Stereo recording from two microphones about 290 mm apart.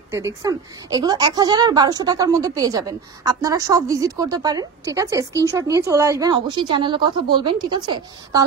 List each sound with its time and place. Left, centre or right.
0.1 s a woman's voice: centre